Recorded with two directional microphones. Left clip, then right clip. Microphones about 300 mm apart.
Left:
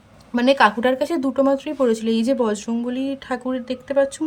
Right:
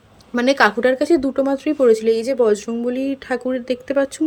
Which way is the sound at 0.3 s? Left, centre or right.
Centre.